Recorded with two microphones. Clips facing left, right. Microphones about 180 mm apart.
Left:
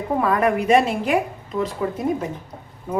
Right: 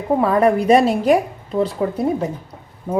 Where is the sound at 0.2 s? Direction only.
30° right (ahead or behind).